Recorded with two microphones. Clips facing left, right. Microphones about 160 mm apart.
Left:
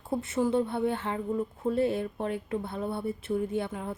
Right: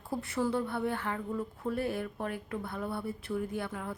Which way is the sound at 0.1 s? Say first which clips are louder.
Left 4 dB; 20° left (ahead or behind).